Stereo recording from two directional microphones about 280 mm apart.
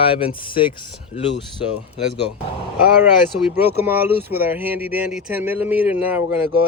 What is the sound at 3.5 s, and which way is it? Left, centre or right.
Speech, centre.